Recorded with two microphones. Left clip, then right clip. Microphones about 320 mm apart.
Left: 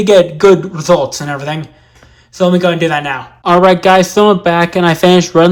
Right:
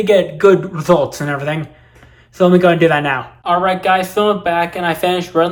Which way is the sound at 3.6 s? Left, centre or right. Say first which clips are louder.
Left 9 dB; centre.